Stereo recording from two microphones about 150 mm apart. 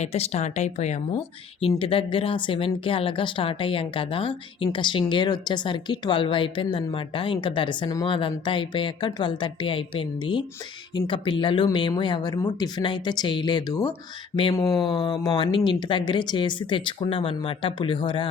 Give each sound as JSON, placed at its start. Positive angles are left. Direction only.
{"t": 0.0, "sound": "speech", "side_deg": 45}
{"t": 1.8, "sound": "speech", "side_deg": 35}
{"t": 14.7, "sound": "speech", "side_deg": 0}
{"t": 14.9, "sound": "speech", "side_deg": 40}